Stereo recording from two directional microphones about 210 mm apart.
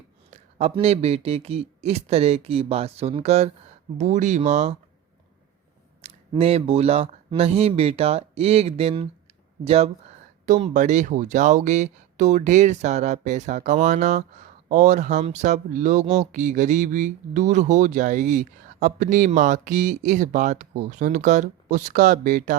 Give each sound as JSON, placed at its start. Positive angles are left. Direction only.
{"t": 0.3, "sound": "a man's voice", "side_deg": -30}
{"t": 6.0, "sound": "speech", "side_deg": -30}